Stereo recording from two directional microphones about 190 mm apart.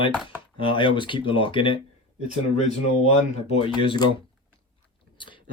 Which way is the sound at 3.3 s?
30° left (ahead or behind).